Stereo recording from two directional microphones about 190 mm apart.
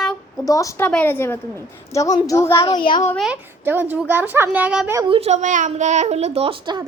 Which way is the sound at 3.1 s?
5° right (ahead or behind).